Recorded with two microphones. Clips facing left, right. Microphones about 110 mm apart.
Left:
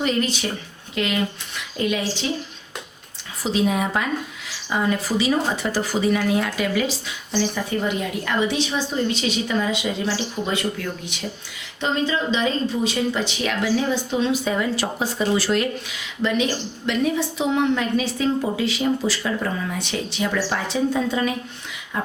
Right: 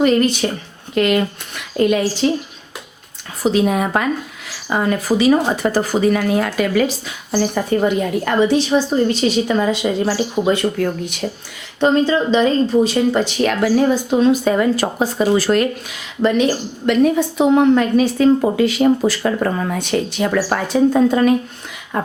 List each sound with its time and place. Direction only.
0.0 s a woman's voice: 50° right (ahead or behind)
3.4 s a woman's voice: 50° right (ahead or behind)